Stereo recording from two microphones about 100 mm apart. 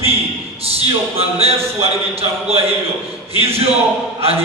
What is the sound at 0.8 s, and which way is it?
Speech, 85° right.